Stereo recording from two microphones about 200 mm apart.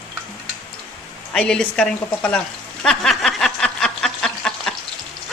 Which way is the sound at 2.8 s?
5° left (ahead or behind).